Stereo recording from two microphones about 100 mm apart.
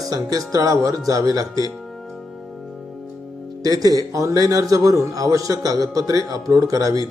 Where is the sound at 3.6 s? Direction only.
40° right (ahead or behind).